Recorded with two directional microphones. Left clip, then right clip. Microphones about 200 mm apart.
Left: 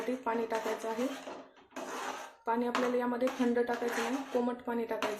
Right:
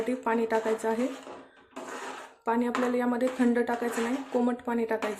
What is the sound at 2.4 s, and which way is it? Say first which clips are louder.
Speech: right 4 dB; 30° right (ahead or behind).